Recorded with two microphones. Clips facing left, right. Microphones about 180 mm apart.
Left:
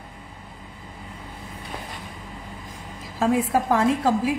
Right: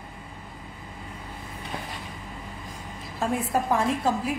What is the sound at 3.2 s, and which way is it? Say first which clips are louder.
A woman's voice: left 5 dB; 90° left.